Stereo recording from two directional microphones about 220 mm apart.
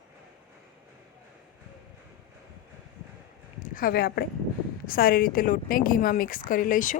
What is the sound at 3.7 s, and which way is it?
A woman's voice, 40° left (ahead or behind).